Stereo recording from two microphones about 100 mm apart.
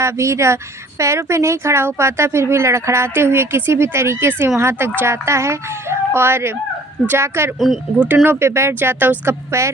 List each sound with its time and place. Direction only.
0.0 s speech: 30° right (ahead or behind)